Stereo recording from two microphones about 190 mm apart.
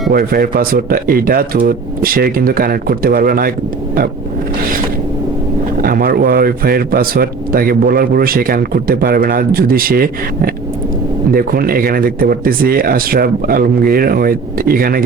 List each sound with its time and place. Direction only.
0.1 s a man's voice: 50° right (ahead or behind)
5.8 s a man's voice: 50° right (ahead or behind)